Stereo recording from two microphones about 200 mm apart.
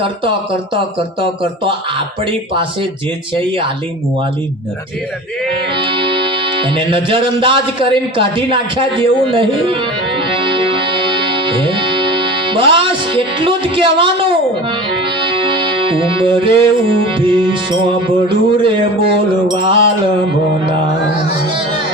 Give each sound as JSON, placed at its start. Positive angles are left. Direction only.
{"t": 0.9, "sound": "music", "side_deg": -25}
{"t": 5.7, "sound": "music", "side_deg": -25}